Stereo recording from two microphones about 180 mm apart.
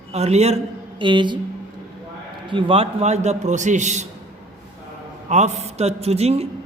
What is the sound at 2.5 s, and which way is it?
A woman's voice, 30° right (ahead or behind).